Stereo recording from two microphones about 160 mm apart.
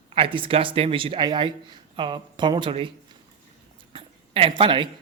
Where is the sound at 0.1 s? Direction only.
35° right (ahead or behind).